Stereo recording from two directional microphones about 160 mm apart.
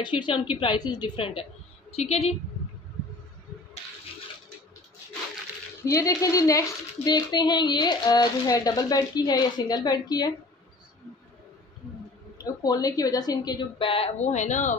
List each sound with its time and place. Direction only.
0.0 s a woman's voice: 30° left (ahead or behind)
5.9 s a woman's voice: 20° left (ahead or behind)
12.4 s a woman's voice: 25° left (ahead or behind); by 14.8 s 50° left (ahead or behind)